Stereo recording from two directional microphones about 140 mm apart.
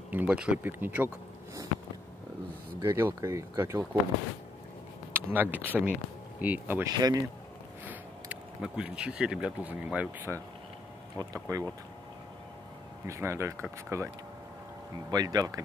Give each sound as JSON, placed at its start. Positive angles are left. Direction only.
{"t": 0.1, "sound": "speech", "side_deg": -10}
{"t": 2.8, "sound": "speech", "side_deg": -15}
{"t": 5.1, "sound": "speech", "side_deg": -15}
{"t": 6.9, "sound": "speech", "side_deg": -25}
{"t": 7.8, "sound": "speech", "side_deg": -10}
{"t": 13.0, "sound": "speech", "side_deg": -20}